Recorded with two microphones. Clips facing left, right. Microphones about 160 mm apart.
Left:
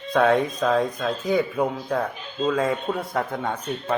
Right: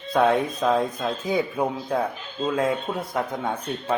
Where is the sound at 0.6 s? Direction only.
10° right (ahead or behind).